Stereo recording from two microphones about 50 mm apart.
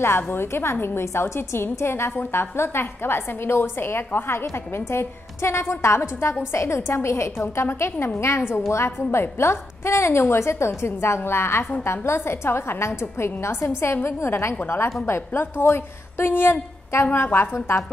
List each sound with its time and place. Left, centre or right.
0.0 s a woman's voice: left
7.6 s a woman's voice: left
8.4 s a woman's voice: left
8.6 s a woman's voice: left